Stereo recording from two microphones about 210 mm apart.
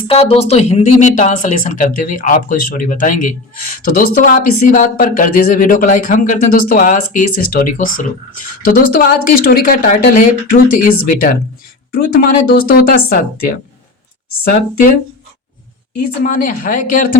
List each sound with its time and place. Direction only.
0.1 s speech: 25° left (ahead or behind); by 13.1 s 45° left (ahead or behind)
16.2 s speech: 40° left (ahead or behind)